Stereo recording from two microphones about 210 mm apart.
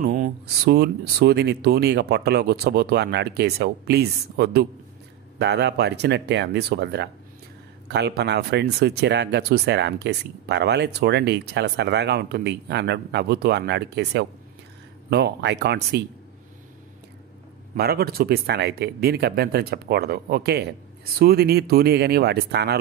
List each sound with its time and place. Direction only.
0.0 s speech: 45° right (ahead or behind)
17.7 s speech: 50° right (ahead or behind)